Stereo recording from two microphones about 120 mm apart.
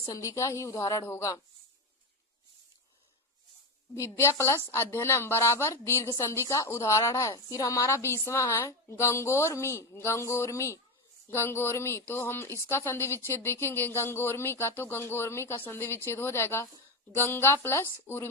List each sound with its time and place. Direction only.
0.0 s a woman's voice: 30° left (ahead or behind)
3.9 s a woman's voice: 25° left (ahead or behind)